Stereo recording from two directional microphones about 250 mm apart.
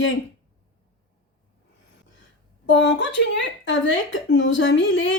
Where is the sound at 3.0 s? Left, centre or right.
Left.